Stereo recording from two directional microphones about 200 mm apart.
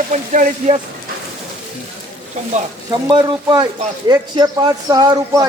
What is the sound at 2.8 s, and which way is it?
A man's voice, 20° right (ahead or behind).